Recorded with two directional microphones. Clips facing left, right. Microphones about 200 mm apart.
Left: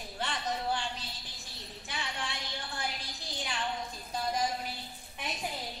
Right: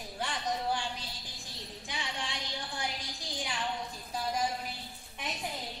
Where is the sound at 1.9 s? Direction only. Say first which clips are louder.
Even; 15° right (ahead or behind).